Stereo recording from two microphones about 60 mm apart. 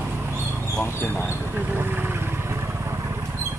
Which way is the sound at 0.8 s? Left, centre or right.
Left.